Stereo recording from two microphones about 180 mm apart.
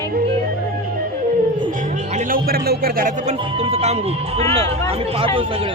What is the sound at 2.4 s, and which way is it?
Speech, 60° right (ahead or behind).